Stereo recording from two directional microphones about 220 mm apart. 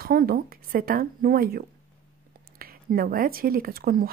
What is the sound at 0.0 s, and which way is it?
Speech, 40° right (ahead or behind).